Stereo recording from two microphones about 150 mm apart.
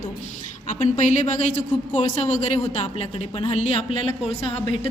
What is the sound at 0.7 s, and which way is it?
A woman's voice, 55° left (ahead or behind).